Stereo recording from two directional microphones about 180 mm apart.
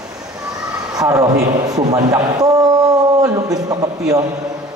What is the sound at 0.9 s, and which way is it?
A man's voice, 20° right (ahead or behind).